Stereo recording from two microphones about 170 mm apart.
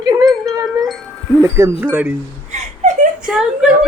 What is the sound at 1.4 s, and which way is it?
Speech, 15° right (ahead or behind).